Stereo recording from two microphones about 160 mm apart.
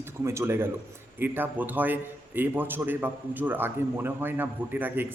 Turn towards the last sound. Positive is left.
turn(degrees=-10)  # may be behind; listen again after turning